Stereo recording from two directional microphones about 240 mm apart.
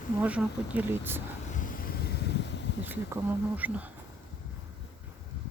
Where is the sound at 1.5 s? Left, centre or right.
Left.